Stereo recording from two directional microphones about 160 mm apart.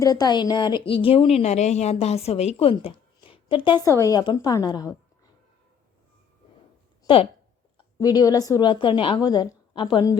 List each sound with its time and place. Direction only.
0.0 s a woman's voice: 25° left (ahead or behind)
3.8 s a woman's voice: 20° left (ahead or behind)
7.1 s a woman's voice: 35° left (ahead or behind)